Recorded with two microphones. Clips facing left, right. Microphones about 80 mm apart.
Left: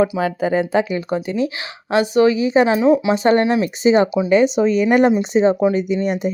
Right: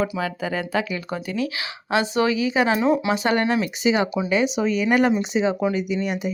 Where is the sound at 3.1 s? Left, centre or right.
Left.